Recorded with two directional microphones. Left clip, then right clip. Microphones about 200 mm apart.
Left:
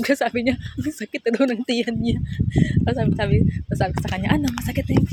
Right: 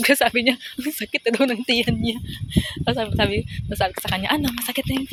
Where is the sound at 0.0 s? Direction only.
10° left (ahead or behind).